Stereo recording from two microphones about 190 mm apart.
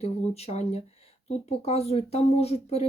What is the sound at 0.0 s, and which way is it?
Speech, 35° left (ahead or behind).